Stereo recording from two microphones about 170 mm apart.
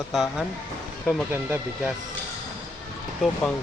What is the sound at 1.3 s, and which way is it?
Speech, 15° right (ahead or behind).